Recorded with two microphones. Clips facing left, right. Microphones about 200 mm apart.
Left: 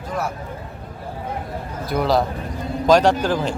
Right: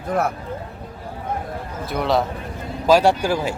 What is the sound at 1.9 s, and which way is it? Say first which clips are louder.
Speech: left 1 dB; centre (ahead or behind).